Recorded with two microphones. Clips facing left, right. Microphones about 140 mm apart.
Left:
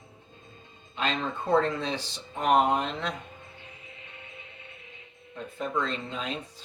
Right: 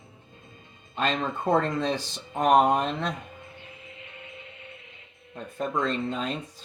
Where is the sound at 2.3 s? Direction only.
45° right (ahead or behind).